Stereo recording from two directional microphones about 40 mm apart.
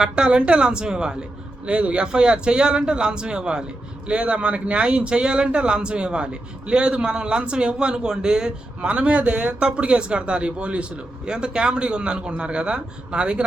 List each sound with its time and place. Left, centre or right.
0.0 s speech: right
8.8 s speech: right